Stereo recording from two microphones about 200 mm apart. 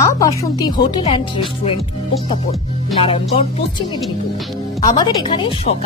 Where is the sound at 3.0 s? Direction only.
30° left (ahead or behind).